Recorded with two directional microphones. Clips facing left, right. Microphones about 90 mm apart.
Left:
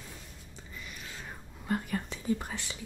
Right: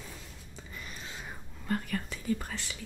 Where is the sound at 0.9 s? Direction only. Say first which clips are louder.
Right 1 dB; 30° right (ahead or behind).